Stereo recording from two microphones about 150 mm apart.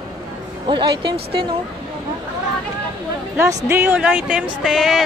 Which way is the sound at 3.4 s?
20° right (ahead or behind).